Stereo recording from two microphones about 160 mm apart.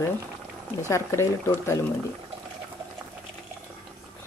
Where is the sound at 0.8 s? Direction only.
15° left (ahead or behind).